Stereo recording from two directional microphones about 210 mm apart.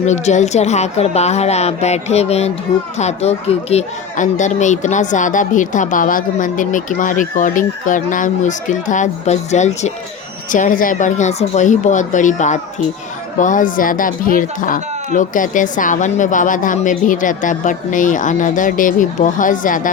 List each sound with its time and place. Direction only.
0.0 s speech: 35° left (ahead or behind)